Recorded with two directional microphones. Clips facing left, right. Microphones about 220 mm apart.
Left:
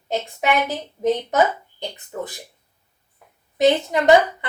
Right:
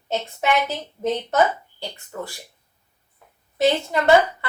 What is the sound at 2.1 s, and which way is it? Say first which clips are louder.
Speech: left 3 dB; 20° left (ahead or behind).